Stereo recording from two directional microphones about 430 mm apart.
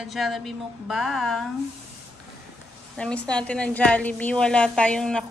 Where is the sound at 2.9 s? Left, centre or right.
Centre.